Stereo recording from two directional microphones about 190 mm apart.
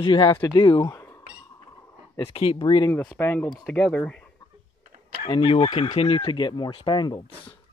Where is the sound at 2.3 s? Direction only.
30° left (ahead or behind); by 4.3 s 5° left (ahead or behind).